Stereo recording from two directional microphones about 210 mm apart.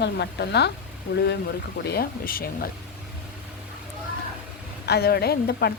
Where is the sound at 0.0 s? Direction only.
55° left (ahead or behind).